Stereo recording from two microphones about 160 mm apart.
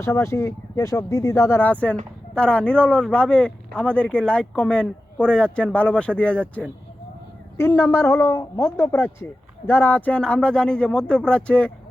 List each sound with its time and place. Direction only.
0.0 s speech: 20° left (ahead or behind)